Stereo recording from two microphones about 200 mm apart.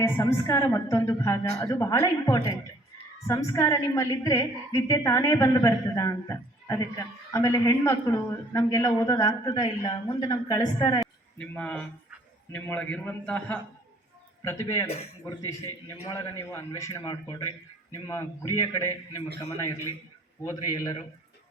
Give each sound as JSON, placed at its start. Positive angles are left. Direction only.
{"t": 0.0, "sound": "a man's voice", "side_deg": 10}
{"t": 11.0, "sound": "a man's voice", "side_deg": 5}
{"t": 16.0, "sound": "a man's voice", "side_deg": 15}